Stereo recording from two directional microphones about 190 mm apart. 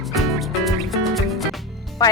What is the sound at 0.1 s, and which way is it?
Music, centre (ahead or behind).